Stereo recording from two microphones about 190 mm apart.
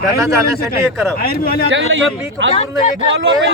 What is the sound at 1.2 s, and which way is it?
Speech, 50° left (ahead or behind).